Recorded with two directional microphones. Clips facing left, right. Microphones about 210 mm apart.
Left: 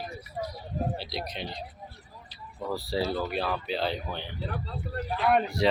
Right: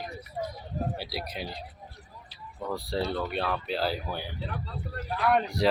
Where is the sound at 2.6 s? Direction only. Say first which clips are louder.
Left 1 dB; centre (ahead or behind).